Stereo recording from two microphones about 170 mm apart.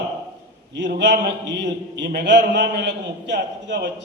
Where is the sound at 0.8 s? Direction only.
85° right.